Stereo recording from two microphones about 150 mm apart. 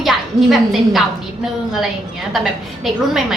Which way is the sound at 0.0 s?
Centre (ahead or behind).